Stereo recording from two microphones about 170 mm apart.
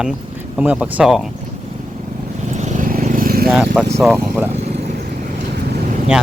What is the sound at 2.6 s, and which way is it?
Vehicle, 50° right (ahead or behind).